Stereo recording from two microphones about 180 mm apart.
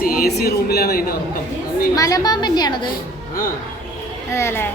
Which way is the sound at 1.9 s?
20° left (ahead or behind).